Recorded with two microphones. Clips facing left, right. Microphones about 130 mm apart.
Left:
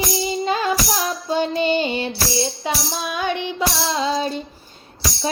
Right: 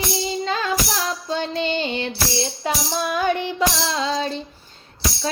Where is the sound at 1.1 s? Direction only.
10° left (ahead or behind).